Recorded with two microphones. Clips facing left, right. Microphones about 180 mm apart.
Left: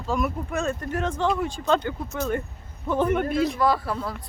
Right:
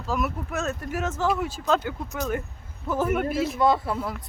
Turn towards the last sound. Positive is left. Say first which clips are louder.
# right 1 dB
turn(degrees=-20)  # may be behind; listen again after turning